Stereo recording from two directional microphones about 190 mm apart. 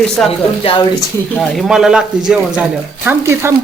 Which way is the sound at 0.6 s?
25° left (ahead or behind).